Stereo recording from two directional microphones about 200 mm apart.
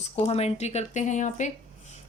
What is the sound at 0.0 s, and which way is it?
A woman's voice, 30° left (ahead or behind).